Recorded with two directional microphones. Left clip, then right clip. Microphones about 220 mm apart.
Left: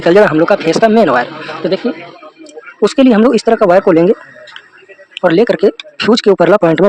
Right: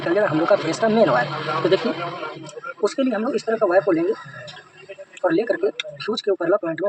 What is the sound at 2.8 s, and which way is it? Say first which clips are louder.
Speech: left 13 dB; 50° left (ahead or behind).